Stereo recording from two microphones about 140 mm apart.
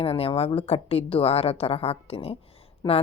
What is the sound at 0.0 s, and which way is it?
A woman's voice, 45° left (ahead or behind).